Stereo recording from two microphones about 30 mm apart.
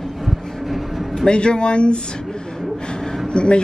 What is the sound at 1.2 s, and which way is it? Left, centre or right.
Speech, left.